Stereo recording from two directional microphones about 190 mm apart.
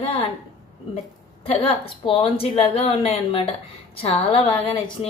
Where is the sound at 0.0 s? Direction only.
30° left (ahead or behind).